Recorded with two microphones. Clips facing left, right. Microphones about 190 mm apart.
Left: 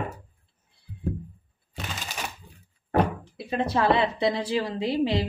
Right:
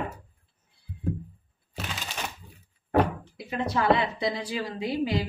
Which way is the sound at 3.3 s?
25° left (ahead or behind).